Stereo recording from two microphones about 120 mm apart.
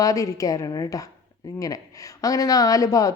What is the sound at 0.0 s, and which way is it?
A woman's voice, 30° left (ahead or behind).